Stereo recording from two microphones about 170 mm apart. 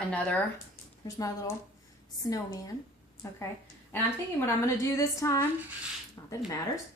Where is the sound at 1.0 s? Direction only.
20° left (ahead or behind).